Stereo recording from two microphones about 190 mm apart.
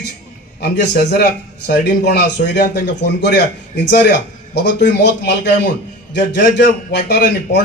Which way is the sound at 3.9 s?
65° left (ahead or behind).